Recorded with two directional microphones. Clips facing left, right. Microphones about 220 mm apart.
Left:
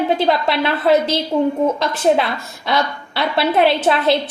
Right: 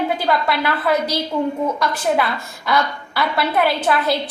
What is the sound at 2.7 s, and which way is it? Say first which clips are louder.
A woman's voice: even; 25° left (ahead or behind).